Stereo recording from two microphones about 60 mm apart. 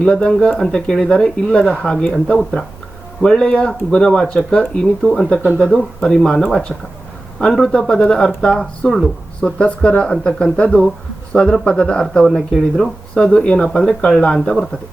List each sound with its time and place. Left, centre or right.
0.0 s speech: centre
5.0 s a man's voice: centre
5.5 s speech: centre
7.3 s a man's voice: centre